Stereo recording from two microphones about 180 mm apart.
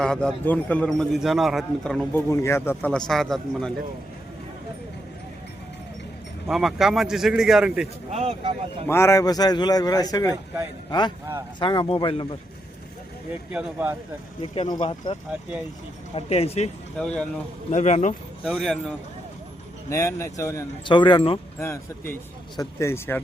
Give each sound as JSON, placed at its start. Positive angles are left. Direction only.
{"t": 0.0, "sound": "a man's voice", "side_deg": 5}
{"t": 6.5, "sound": "a man's voice", "side_deg": 0}
{"t": 8.1, "sound": "speech", "side_deg": -35}
{"t": 8.9, "sound": "a man's voice", "side_deg": 15}
{"t": 11.6, "sound": "a man's voice", "side_deg": 25}
{"t": 13.5, "sound": "a man's voice", "side_deg": -5}
{"t": 14.4, "sound": "speech", "side_deg": 30}
{"t": 17.0, "sound": "a man's voice", "side_deg": 5}
{"t": 17.7, "sound": "speech", "side_deg": 40}
{"t": 18.4, "sound": "a man's voice", "side_deg": 0}
{"t": 19.9, "sound": "a man's voice", "side_deg": 15}
{"t": 21.6, "sound": "speech", "side_deg": 15}